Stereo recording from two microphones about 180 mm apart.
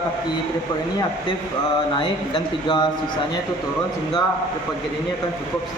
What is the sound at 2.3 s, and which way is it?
Speech, 25° left (ahead or behind).